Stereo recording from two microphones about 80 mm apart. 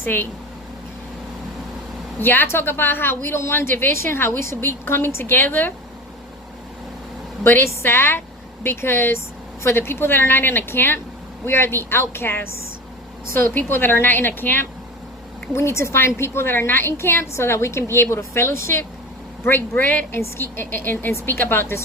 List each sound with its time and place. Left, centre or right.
0.0 s speech: left
2.2 s a woman's voice: left
7.4 s a woman's voice: left